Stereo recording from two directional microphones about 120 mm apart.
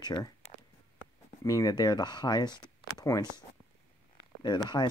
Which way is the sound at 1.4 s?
30° left (ahead or behind).